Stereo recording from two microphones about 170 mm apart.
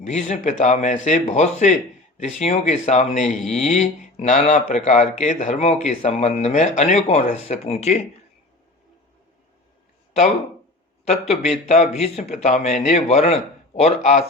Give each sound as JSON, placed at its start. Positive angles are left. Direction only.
{"t": 0.0, "sound": "speech", "side_deg": 40}
{"t": 3.4, "sound": "speech", "side_deg": 5}
{"t": 3.7, "sound": "speech", "side_deg": 45}
{"t": 11.0, "sound": "speech", "side_deg": 40}